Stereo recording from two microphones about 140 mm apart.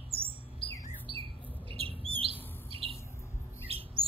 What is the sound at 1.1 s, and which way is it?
Squawk, 40° right (ahead or behind).